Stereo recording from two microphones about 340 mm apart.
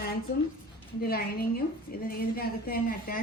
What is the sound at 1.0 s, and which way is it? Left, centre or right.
A woman's voice, left.